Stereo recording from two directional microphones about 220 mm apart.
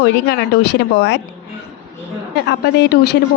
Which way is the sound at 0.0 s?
50° left (ahead or behind).